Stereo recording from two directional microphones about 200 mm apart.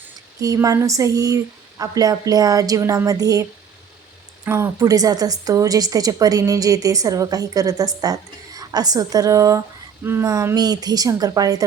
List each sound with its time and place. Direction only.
0.3 s speech: 15° right (ahead or behind)
4.4 s speech: 15° right (ahead or behind)